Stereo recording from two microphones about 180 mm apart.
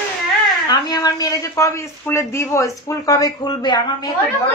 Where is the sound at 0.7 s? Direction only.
20° left (ahead or behind).